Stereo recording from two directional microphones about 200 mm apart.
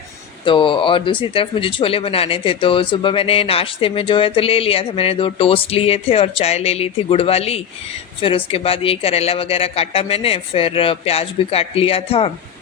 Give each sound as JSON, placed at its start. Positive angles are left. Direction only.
{"t": 0.4, "sound": "speech", "side_deg": 25}